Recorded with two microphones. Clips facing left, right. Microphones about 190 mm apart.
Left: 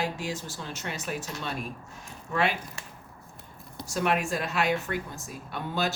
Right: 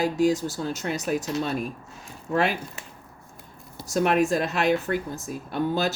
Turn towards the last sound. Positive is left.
turn(degrees=-40)  # may be behind; listen again after turning